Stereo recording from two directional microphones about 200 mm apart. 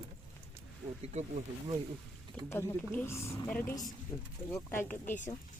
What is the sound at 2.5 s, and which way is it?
Speech, 10° left (ahead or behind).